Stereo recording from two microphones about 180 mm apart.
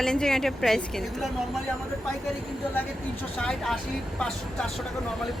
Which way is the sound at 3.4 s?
5° left (ahead or behind).